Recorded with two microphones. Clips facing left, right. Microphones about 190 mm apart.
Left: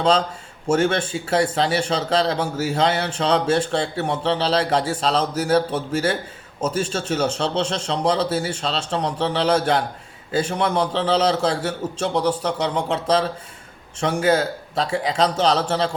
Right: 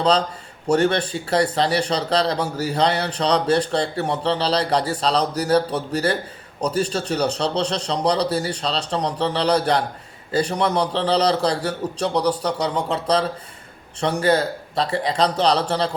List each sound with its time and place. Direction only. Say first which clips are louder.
0.7 s a man's voice: right 1 dB; 5° left (ahead or behind)